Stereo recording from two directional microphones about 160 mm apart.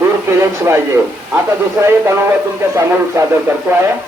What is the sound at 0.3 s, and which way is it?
Speech, 15° right (ahead or behind).